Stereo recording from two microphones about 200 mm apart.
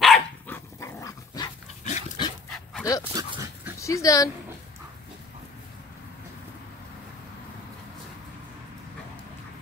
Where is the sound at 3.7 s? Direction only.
15° left (ahead or behind).